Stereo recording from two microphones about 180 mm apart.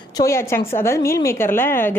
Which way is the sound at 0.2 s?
15° left (ahead or behind).